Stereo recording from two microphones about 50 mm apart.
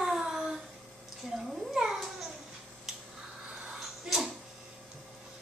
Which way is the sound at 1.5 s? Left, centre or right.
Centre.